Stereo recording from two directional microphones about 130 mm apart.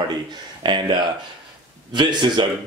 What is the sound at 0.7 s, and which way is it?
Speech, 35° right (ahead or behind).